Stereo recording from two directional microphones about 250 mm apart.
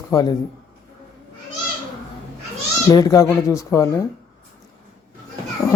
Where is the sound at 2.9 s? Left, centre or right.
Centre.